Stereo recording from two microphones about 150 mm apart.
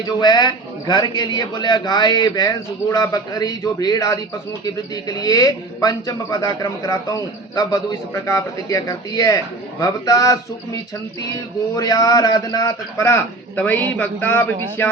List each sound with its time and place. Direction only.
0.2 s a man's voice: 30° left (ahead or behind)
11.8 s a man's voice: 25° left (ahead or behind)